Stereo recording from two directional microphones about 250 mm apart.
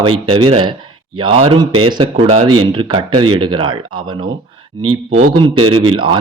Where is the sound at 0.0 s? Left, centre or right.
Centre.